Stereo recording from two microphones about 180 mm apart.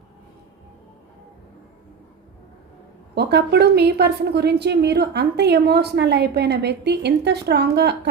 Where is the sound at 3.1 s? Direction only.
65° right (ahead or behind).